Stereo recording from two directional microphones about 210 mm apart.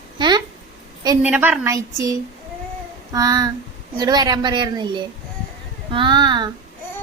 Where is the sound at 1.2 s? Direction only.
5° right (ahead or behind).